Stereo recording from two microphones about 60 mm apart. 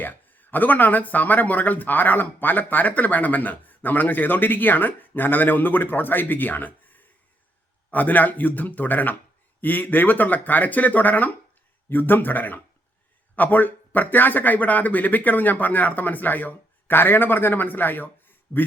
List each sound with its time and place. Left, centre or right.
0.0 s speech: left